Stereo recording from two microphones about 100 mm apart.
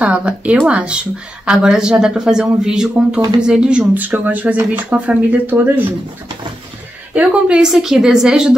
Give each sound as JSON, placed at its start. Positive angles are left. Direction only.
{"t": 0.0, "sound": "speech", "side_deg": -10}
{"t": 7.2, "sound": "speech", "side_deg": -10}